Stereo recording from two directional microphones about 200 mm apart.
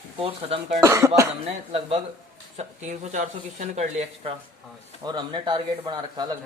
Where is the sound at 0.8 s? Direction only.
15° right (ahead or behind).